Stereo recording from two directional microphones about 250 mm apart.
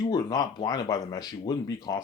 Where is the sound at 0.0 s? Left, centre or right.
Centre.